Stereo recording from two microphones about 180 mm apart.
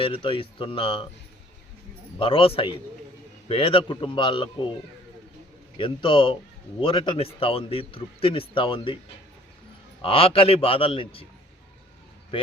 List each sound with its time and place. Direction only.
0.0 s a man's voice: 30° left (ahead or behind)
2.1 s a man's voice: 30° left (ahead or behind)
5.7 s a man's voice: 30° left (ahead or behind)
10.0 s a man's voice: 30° left (ahead or behind)